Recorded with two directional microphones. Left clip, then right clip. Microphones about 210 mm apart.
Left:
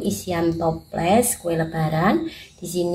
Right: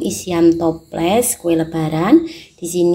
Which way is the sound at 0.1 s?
35° right (ahead or behind).